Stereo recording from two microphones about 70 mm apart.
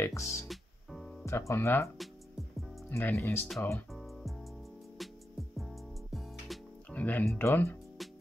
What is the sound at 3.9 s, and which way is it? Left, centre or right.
Music, centre.